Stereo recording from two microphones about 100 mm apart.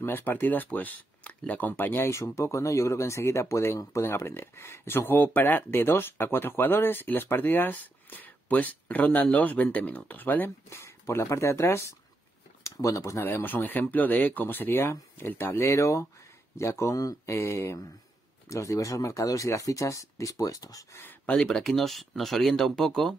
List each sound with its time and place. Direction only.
0.0 s speech: 20° left (ahead or behind); by 21.0 s 35° left (ahead or behind)
21.0 s speech: 20° left (ahead or behind)
21.4 s speech: 5° left (ahead or behind)